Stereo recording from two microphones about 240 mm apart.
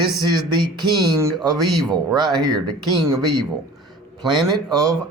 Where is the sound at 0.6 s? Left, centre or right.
Centre.